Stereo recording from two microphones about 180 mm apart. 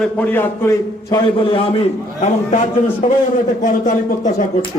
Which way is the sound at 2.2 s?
40° left (ahead or behind).